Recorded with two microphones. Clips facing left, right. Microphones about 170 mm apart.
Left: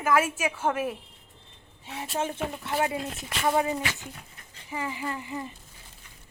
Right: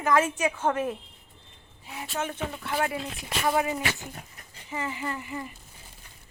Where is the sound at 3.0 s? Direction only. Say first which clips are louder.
Left 1 dB; centre (ahead or behind).